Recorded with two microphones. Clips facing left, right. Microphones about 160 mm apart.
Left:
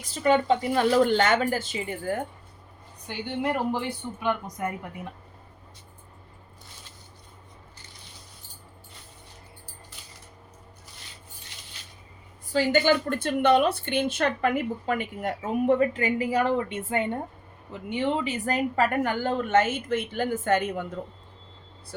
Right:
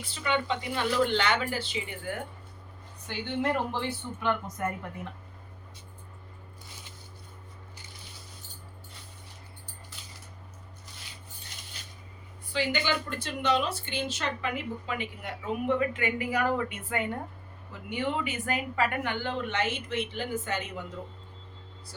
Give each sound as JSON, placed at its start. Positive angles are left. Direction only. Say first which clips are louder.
{"t": 0.0, "sound": "a woman's voice", "louder": "left 8 dB", "side_deg": 40}
{"t": 3.1, "sound": "speech", "louder": "left 1 dB", "side_deg": 10}
{"t": 12.5, "sound": "a woman's voice", "louder": "left 8 dB", "side_deg": 45}